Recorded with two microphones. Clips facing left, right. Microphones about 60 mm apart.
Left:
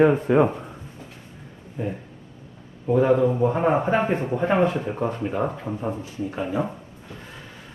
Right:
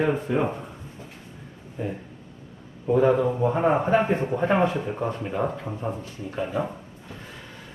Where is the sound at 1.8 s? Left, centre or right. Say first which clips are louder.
Left 2 dB; centre.